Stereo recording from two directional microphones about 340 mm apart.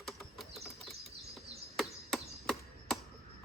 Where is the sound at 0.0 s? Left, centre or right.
Centre.